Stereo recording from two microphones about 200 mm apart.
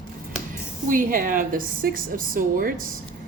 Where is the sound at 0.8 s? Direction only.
40° right (ahead or behind).